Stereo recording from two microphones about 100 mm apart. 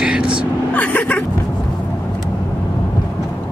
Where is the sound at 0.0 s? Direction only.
10° right (ahead or behind).